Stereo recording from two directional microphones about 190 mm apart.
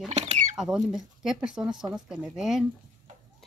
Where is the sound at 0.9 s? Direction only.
Centre (ahead or behind).